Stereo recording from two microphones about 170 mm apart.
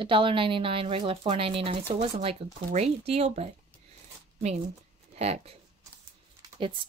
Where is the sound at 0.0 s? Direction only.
30° right (ahead or behind).